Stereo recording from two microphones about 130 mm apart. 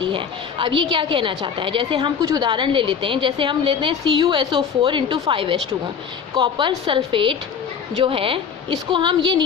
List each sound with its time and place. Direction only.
0.0 s a woman's voice: 40° right (ahead or behind)